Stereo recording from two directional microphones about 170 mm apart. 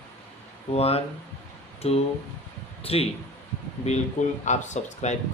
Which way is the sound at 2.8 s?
35° left (ahead or behind).